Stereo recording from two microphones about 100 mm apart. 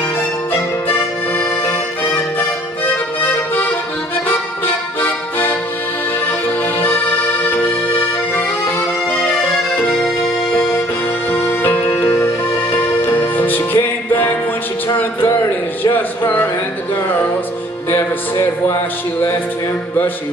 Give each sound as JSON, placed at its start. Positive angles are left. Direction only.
{"t": 2.9, "sound": "music", "side_deg": 20}
{"t": 6.8, "sound": "accordion", "side_deg": 20}
{"t": 11.3, "sound": "music", "side_deg": 20}
{"t": 15.0, "sound": "a sound", "side_deg": 25}
{"t": 17.9, "sound": "music", "side_deg": 25}